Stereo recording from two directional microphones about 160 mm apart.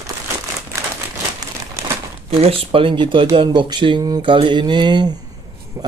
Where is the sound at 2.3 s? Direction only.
35° right (ahead or behind).